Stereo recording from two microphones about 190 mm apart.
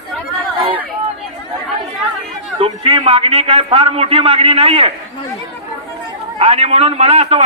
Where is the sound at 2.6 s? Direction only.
30° right (ahead or behind).